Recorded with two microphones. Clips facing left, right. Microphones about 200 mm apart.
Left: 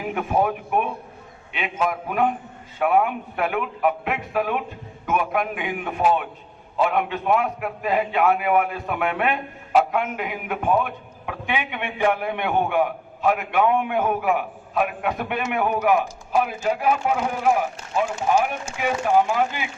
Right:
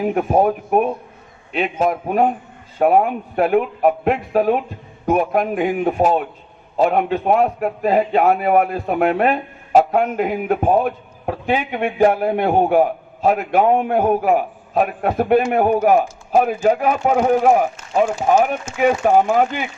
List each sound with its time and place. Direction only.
0.0 s a man's voice: 40° right (ahead or behind)